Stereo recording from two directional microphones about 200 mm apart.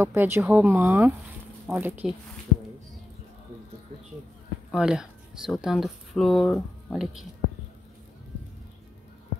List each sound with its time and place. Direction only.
0.0 s speech: 10° right (ahead or behind)
4.6 s speech: 5° right (ahead or behind)